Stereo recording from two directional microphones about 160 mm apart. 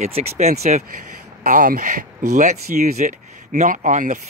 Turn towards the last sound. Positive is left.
turn(degrees=-50)  # may be behind; listen again after turning